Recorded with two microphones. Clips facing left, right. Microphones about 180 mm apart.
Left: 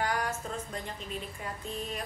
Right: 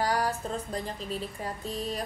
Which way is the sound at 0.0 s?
35° right (ahead or behind).